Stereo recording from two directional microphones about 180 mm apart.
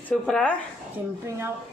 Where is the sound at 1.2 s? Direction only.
15° right (ahead or behind).